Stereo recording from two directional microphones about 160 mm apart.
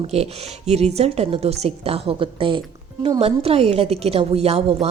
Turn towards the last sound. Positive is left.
turn(degrees=-40)  # may be behind; listen again after turning